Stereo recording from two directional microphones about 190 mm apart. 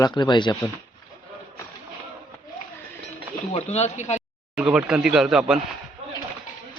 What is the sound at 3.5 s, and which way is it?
Speech, 35° left (ahead or behind).